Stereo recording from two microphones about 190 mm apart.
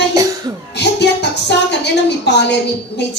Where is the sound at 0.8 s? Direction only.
65° left (ahead or behind).